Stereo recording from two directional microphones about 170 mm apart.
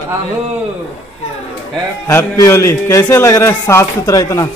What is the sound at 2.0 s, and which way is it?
A man's voice, 15° left (ahead or behind).